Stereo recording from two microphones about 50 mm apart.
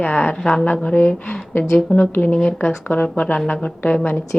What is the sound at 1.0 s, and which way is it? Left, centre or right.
Speech, left.